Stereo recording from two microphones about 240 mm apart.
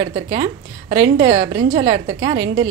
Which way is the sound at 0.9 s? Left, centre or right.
Right.